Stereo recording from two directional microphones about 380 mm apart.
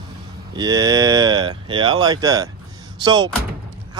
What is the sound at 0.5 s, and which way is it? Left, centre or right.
Speech, centre.